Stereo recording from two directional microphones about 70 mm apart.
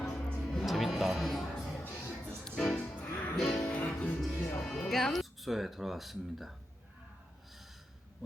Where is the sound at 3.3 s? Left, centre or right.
Centre.